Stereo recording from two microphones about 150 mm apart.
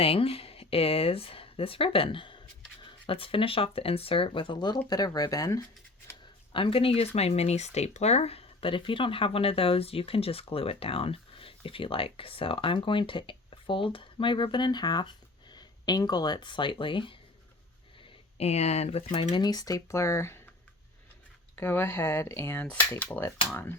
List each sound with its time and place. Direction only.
0.0 s speech: 40° left (ahead or behind); by 5.6 s 25° left (ahead or behind)
6.5 s speech: 35° left (ahead or behind)
18.0 s speech: 45° left (ahead or behind)
19.3 s speech: 25° left (ahead or behind)
21.5 s speech: 15° left (ahead or behind)